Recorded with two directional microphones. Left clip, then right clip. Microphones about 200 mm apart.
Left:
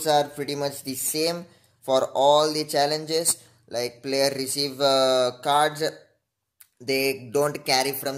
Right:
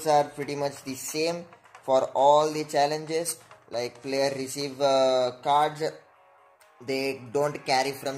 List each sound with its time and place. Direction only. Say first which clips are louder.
0.0 s speech: left 1 dB; 5° left (ahead or behind)